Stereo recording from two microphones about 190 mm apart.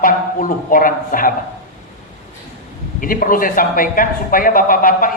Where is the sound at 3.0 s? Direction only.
45° left (ahead or behind).